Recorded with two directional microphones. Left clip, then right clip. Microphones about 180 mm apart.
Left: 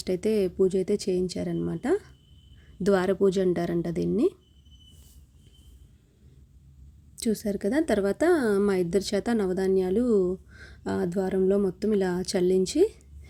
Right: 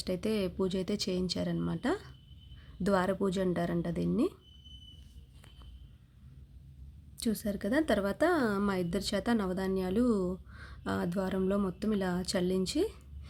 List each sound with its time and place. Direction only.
0.0 s a woman's voice: 15° left (ahead or behind)
7.2 s a woman's voice: 15° left (ahead or behind)